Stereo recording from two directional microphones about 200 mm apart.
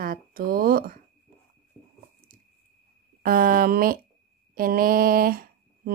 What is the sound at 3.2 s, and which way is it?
Speech, 45° right (ahead or behind).